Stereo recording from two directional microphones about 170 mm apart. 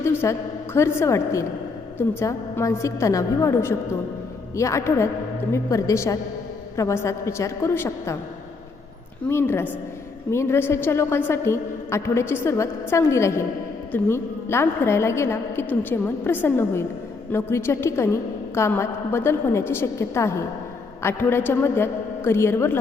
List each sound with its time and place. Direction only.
0.0 s a woman's voice: 15° left (ahead or behind)
9.3 s a woman's voice: 15° left (ahead or behind)